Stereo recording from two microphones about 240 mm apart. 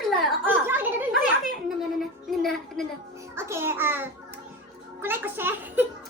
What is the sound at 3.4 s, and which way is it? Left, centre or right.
A child's voice, centre.